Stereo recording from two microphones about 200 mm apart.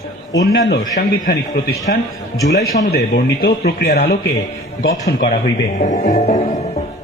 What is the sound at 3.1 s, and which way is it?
A man's voice, 55° left (ahead or behind).